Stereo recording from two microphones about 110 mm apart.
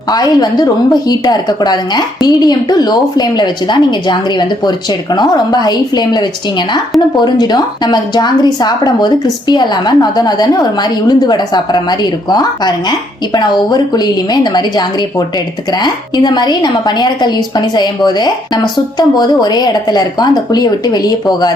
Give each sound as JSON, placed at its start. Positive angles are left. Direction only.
{"t": 0.1, "sound": "a woman's voice", "side_deg": 35}